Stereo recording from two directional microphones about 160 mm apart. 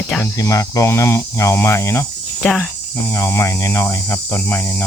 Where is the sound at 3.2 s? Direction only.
20° left (ahead or behind).